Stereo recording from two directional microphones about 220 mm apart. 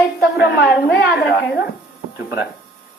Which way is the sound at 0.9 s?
50° left (ahead or behind).